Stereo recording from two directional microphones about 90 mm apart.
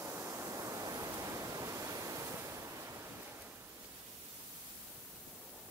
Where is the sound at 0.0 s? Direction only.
30° right (ahead or behind).